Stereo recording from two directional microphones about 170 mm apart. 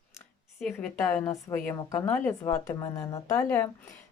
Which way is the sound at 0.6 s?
Centre (ahead or behind).